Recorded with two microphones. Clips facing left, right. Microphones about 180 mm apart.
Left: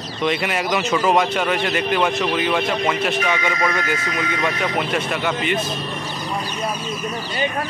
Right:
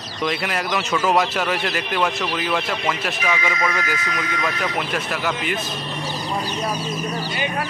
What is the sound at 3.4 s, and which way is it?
Speech, 30° left (ahead or behind).